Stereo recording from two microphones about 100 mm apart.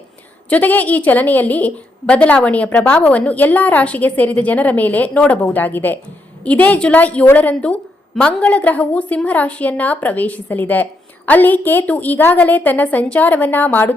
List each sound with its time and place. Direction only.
0.5 s a woman's voice: 15° left (ahead or behind)